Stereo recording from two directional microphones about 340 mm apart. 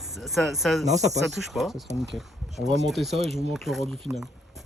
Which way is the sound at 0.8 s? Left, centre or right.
Centre.